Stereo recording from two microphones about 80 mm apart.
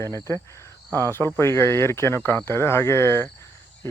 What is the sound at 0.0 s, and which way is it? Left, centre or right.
Speech, left.